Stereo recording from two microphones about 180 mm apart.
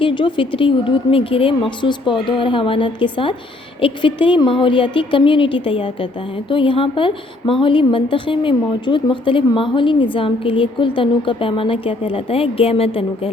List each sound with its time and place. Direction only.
0.0 s a woman's voice: 25° left (ahead or behind)